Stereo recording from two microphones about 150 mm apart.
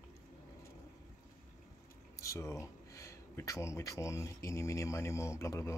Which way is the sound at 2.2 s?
20° left (ahead or behind).